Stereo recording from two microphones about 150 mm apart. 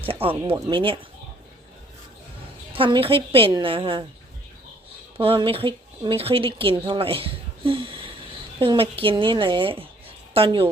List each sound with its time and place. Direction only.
0.0 s a woman's voice: 35° right (ahead or behind)
2.7 s a woman's voice: 35° right (ahead or behind)
5.1 s a woman's voice: 35° right (ahead or behind)